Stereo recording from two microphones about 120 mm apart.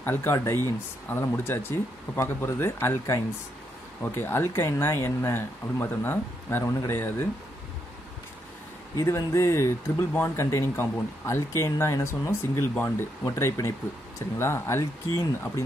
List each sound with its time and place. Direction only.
0.0 s speech: 20° left (ahead or behind)
8.9 s speech: 25° left (ahead or behind)